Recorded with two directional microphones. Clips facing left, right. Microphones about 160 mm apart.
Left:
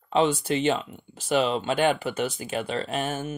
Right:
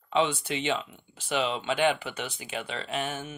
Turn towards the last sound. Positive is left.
turn(degrees=40)  # may be behind; listen again after turning